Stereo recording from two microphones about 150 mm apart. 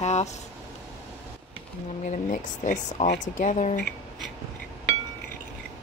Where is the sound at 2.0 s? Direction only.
60° left (ahead or behind); by 3.2 s 75° left (ahead or behind).